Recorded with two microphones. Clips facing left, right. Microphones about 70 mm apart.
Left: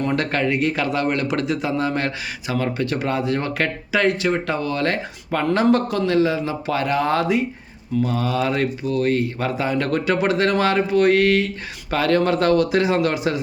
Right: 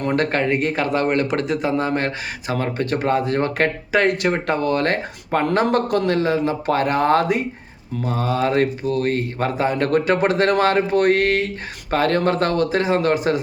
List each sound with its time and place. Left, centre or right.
0.2 s a man's voice: right
8.0 s speech: right